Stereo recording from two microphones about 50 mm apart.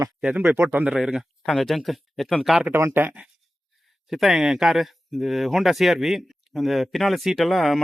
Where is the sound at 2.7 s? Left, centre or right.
Right.